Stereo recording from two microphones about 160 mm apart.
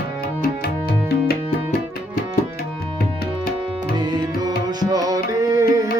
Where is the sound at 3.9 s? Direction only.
25° right (ahead or behind).